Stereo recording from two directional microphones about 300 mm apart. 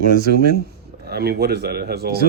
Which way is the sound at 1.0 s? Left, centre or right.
Right.